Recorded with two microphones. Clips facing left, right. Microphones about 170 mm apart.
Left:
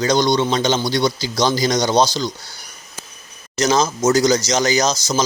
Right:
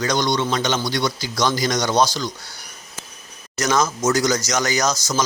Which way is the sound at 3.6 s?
25° left (ahead or behind).